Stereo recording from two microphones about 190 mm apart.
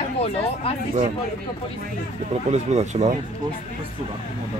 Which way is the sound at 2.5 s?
35° right (ahead or behind).